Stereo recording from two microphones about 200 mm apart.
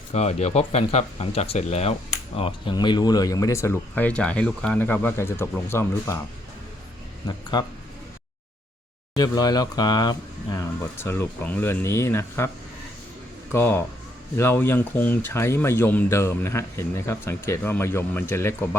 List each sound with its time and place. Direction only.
0.1 s speech: 35° left (ahead or behind); by 6.1 s 10° left (ahead or behind)
7.5 s speech: 20° left (ahead or behind)
9.1 s speech: 20° left (ahead or behind)
13.5 s speech: 10° left (ahead or behind)